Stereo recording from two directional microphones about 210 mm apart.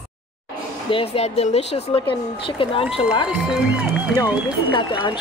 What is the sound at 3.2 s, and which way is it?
Speech, 5° right (ahead or behind).